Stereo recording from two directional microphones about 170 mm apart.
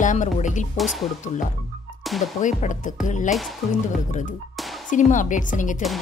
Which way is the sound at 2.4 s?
45° left (ahead or behind).